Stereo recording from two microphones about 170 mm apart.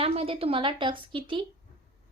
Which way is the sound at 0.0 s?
35° right (ahead or behind).